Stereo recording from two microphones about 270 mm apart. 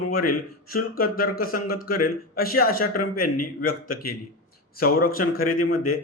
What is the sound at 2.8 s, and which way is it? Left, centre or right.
Speech, left.